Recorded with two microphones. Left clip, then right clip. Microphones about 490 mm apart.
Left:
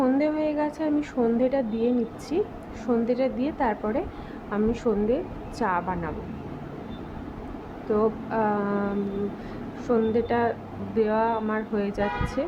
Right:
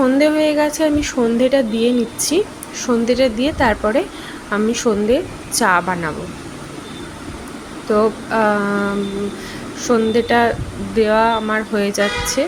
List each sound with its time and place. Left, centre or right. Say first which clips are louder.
0.0 s a sound: right 10 dB; left
1.4 s speech: right 9 dB; left
7.9 s speech: right 9 dB; left